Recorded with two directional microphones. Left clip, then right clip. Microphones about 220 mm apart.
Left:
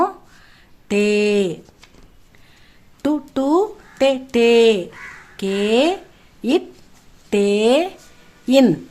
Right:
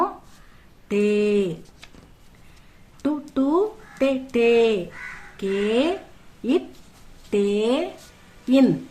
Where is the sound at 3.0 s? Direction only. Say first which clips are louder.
Left 4 dB; 50° left (ahead or behind).